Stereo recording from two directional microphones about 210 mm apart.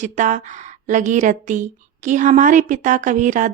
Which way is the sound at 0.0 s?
35° right (ahead or behind).